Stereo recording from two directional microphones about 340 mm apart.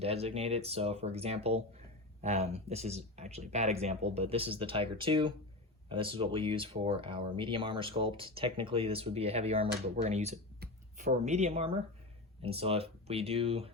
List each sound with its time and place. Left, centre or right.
0.0 s speech: centre